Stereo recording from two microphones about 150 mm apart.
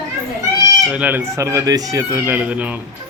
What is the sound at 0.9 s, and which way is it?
A man's voice, 10° right (ahead or behind).